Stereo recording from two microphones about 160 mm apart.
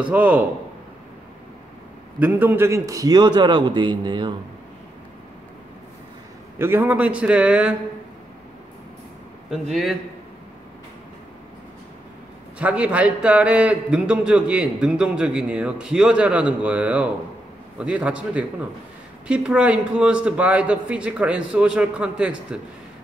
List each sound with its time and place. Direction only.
0.1 s a man's voice: 10° right (ahead or behind)
2.1 s a man's voice: 10° right (ahead or behind); by 4.4 s 30° right (ahead or behind)
6.6 s a man's voice: 15° right (ahead or behind)
9.5 s a man's voice: centre (ahead or behind)
12.5 s a man's voice: 10° right (ahead or behind)